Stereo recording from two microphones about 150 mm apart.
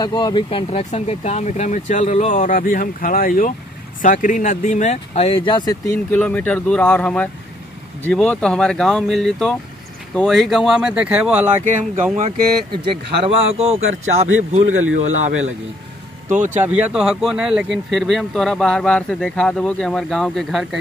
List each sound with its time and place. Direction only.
0.0 s speech: 30° left (ahead or behind)
5.9 s speech: 10° left (ahead or behind); by 11.6 s 10° right (ahead or behind)
12.7 s a man's voice: 35° right (ahead or behind); by 16.5 s 55° right (ahead or behind)
16.6 s speech: 10° right (ahead or behind)